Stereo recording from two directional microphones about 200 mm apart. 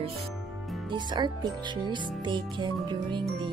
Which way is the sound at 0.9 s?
20° right (ahead or behind).